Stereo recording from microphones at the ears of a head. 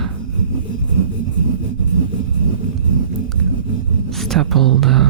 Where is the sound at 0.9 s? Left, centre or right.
Right.